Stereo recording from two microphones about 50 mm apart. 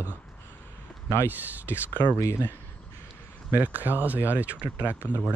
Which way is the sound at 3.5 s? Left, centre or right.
Right.